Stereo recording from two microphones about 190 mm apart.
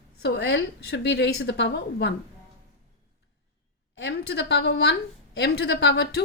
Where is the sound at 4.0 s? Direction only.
60° left (ahead or behind).